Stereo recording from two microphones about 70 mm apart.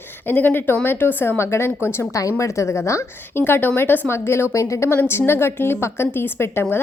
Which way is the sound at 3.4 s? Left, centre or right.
Left.